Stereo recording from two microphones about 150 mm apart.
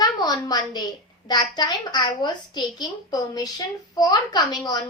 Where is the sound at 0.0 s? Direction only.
25° left (ahead or behind).